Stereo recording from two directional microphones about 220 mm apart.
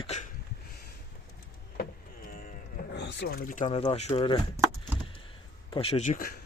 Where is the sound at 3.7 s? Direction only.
25° left (ahead or behind).